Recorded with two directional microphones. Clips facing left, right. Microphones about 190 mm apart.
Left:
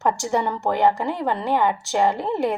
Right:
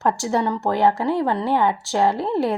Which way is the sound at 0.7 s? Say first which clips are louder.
Right 1 dB; 15° left (ahead or behind).